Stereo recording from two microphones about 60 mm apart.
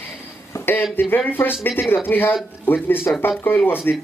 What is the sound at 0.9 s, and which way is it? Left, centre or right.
Speech, left.